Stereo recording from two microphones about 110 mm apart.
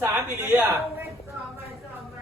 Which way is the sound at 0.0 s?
20° right (ahead or behind).